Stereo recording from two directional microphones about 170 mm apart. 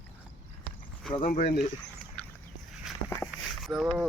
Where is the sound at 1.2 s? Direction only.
55° left (ahead or behind).